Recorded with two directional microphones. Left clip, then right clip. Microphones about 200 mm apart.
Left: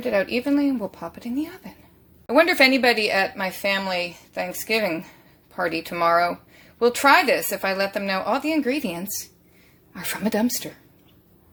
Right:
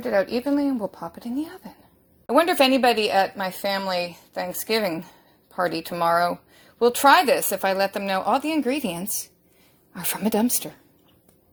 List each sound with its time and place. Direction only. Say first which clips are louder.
0.0 s a woman's voice: even; 25° right (ahead or behind)